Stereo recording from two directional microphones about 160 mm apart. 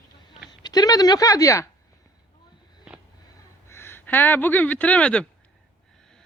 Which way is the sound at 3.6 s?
15° left (ahead or behind).